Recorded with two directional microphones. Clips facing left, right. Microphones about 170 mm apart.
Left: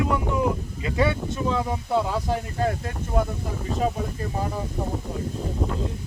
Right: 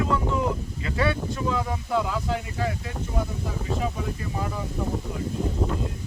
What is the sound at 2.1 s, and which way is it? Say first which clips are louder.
Speech: left 2 dB; 45° left (ahead or behind).